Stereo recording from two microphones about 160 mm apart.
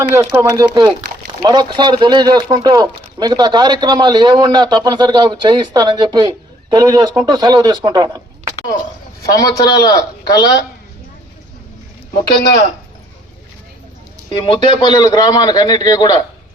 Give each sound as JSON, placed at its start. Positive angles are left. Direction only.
{"t": 0.1, "sound": "speech", "side_deg": -10}
{"t": 0.5, "sound": "speech", "side_deg": -25}
{"t": 9.3, "sound": "a man's voice", "side_deg": 20}
{"t": 14.3, "sound": "a man's voice", "side_deg": 30}